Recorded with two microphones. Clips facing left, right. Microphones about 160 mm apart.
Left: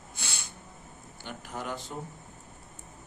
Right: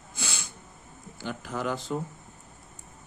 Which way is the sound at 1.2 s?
90° right.